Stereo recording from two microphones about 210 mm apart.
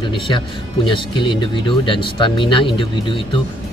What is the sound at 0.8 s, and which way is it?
Speech, 25° left (ahead or behind).